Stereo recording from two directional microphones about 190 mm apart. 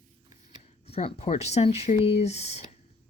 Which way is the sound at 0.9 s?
35° left (ahead or behind).